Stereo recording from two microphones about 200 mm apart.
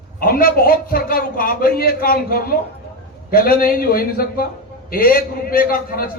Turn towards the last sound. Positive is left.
turn(degrees=45)  # may be behind; listen again after turning